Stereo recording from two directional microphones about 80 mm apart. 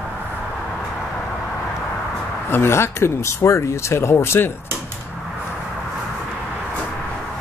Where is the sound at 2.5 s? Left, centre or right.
Left.